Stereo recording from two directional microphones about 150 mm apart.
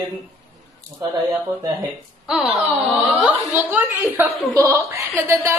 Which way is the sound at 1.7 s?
5° right (ahead or behind).